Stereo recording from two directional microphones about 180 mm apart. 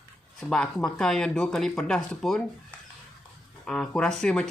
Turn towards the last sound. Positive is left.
turn(degrees=5)  # may be behind; listen again after turning